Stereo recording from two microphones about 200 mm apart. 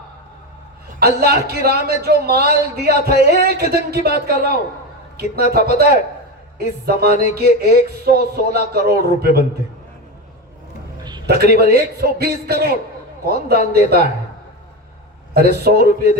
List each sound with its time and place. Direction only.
0.9 s a man's voice: 50° right (ahead or behind)
11.3 s a man's voice: 50° right (ahead or behind)
15.3 s a man's voice: 50° right (ahead or behind)